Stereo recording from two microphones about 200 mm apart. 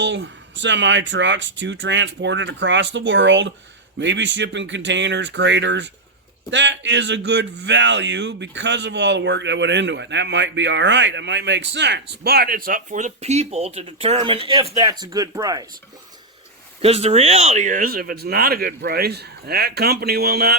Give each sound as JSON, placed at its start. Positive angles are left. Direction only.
{"t": 0.0, "sound": "speech", "side_deg": -65}
{"t": 16.8, "sound": "speech", "side_deg": -30}